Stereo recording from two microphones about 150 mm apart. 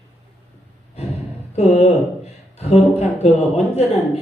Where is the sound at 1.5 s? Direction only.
45° left (ahead or behind).